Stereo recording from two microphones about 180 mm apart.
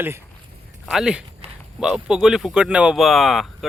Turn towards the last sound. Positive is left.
turn(degrees=0)  # may be behind; listen again after turning